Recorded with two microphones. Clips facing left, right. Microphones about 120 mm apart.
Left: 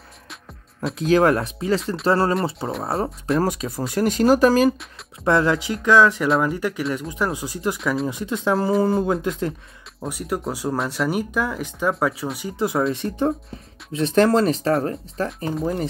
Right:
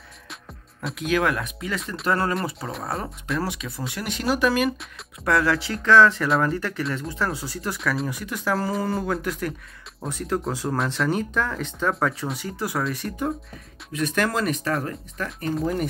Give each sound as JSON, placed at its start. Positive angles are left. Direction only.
{"t": 0.9, "sound": "speech", "side_deg": 35}
{"t": 3.3, "sound": "speech", "side_deg": 40}
{"t": 5.2, "sound": "speech", "side_deg": 25}
{"t": 7.8, "sound": "speech", "side_deg": 0}
{"t": 8.1, "sound": "speech", "side_deg": 20}
{"t": 10.0, "sound": "speech", "side_deg": 10}